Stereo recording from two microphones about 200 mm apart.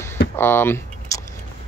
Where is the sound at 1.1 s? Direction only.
15° left (ahead or behind).